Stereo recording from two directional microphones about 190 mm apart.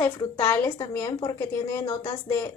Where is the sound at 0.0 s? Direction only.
15° left (ahead or behind).